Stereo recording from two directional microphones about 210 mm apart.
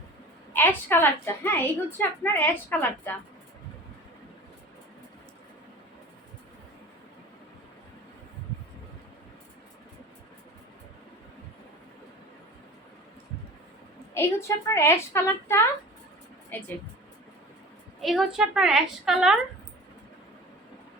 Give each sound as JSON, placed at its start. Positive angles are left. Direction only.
{"t": 0.5, "sound": "a woman's voice", "side_deg": 10}
{"t": 14.1, "sound": "a woman's voice", "side_deg": 10}
{"t": 18.0, "sound": "a woman's voice", "side_deg": 0}